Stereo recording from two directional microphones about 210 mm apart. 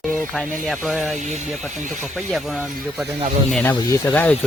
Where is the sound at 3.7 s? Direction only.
20° left (ahead or behind).